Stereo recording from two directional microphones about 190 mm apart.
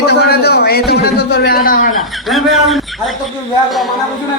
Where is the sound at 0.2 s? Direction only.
55° left (ahead or behind).